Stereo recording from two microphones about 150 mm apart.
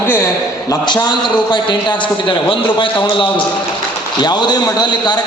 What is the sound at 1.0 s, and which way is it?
A man's voice, 30° left (ahead or behind).